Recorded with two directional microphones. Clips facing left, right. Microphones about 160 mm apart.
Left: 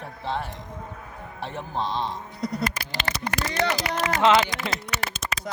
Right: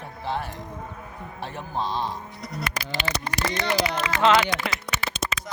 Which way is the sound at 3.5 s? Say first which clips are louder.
Even; 45° left (ahead or behind).